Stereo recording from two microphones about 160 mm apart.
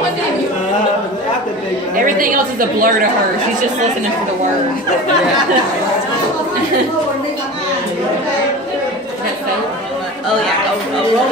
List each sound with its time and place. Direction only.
2.0 s a woman's voice: 60° right (ahead or behind)